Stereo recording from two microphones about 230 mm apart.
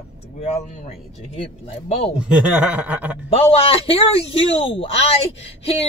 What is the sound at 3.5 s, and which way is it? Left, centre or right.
Speech, left.